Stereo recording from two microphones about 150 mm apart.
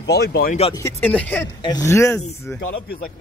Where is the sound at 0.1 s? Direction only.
90° left.